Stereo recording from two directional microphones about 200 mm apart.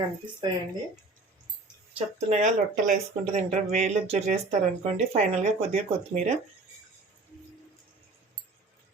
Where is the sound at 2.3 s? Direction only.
35° right (ahead or behind).